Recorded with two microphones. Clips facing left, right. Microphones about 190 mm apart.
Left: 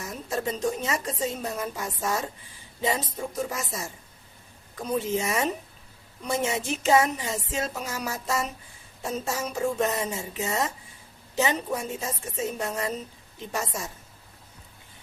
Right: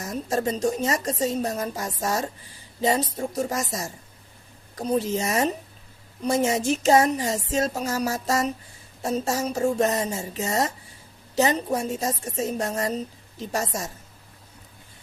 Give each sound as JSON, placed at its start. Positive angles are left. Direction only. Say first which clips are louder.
{"t": 0.0, "sound": "a woman's voice", "louder": "right 5 dB", "side_deg": -40}